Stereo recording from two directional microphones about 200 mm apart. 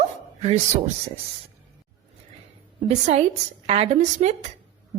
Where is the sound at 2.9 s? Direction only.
35° right (ahead or behind).